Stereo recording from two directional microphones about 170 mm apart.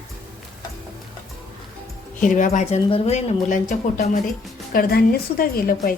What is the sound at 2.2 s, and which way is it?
Speech, 50° left (ahead or behind).